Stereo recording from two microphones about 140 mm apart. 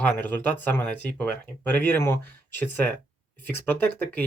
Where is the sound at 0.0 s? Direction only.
15° left (ahead or behind).